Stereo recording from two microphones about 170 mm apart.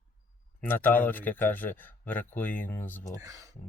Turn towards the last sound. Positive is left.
turn(degrees=10)  # may be behind; listen again after turning